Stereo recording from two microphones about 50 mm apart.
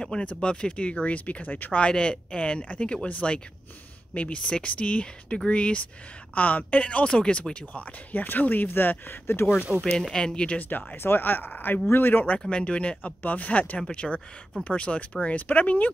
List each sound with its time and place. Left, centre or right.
0.0 s speech: centre; by 1.8 s left
1.8 s speech: left
9.7 s speech: centre
10.1 s speech: centre
11.0 s speech: left
12.4 s speech: left